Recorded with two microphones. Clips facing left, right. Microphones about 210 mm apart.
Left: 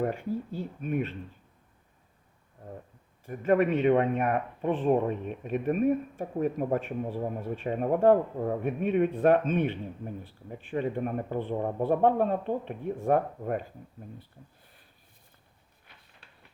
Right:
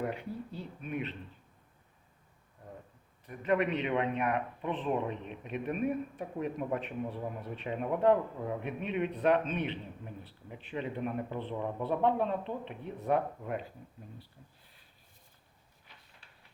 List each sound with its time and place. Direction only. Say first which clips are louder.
0.0 s speech: left 6 dB; 45° left (ahead or behind)
3.2 s speech: left 6 dB; 45° left (ahead or behind)